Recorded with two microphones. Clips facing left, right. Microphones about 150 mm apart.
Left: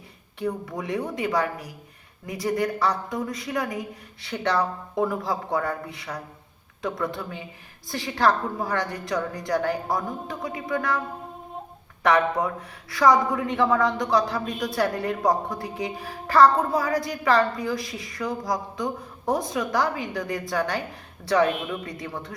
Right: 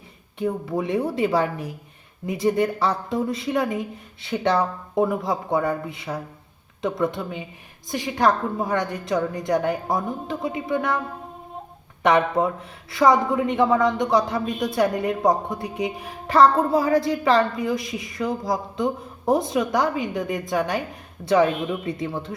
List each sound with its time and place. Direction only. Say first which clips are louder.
0.3 s a woman's voice: right 4 dB; 25° right (ahead or behind)
12.0 s a woman's voice: right 2 dB; 20° right (ahead or behind)